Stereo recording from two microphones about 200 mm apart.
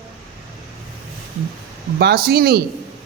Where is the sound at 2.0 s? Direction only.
55° right (ahead or behind).